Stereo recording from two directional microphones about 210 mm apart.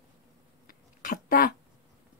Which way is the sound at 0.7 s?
40° left (ahead or behind).